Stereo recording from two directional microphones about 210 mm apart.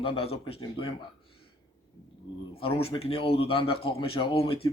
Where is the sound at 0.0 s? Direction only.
25° left (ahead or behind).